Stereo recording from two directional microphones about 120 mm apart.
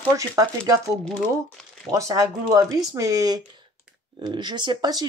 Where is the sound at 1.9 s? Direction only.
25° right (ahead or behind).